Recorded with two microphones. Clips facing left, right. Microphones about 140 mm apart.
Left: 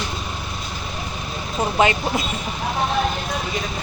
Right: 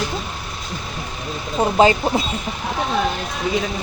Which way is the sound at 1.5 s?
30° right (ahead or behind).